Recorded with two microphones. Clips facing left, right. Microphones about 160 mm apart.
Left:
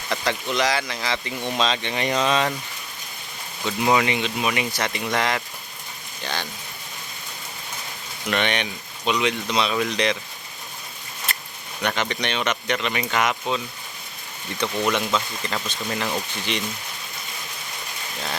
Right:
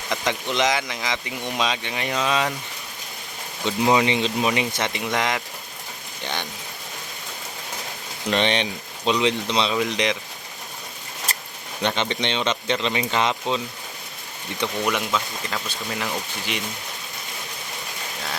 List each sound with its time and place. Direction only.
0.1 s speech: 20° right (ahead or behind)
3.6 s speech: 20° right (ahead or behind)
8.3 s speech: 30° right (ahead or behind)
11.8 s speech: 25° right (ahead or behind)
14.8 s speech: 5° right (ahead or behind)